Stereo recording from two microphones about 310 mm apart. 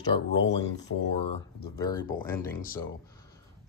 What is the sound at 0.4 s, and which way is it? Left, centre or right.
Speech, left.